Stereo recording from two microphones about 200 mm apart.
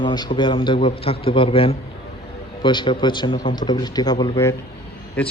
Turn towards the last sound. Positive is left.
turn(degrees=5)  # may be behind; listen again after turning